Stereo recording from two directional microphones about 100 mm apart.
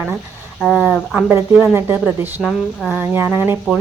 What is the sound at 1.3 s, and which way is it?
A woman's voice, 25° right (ahead or behind).